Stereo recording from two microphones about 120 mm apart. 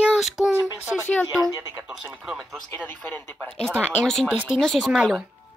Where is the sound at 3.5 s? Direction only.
5° left (ahead or behind).